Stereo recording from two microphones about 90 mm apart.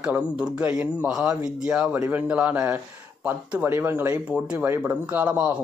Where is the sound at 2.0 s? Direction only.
20° right (ahead or behind).